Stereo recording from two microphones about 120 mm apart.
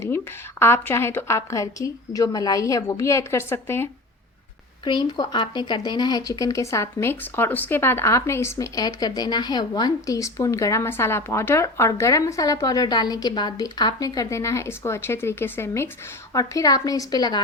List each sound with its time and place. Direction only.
0.6 s speech: 20° left (ahead or behind)
4.9 s a woman's voice: 40° left (ahead or behind)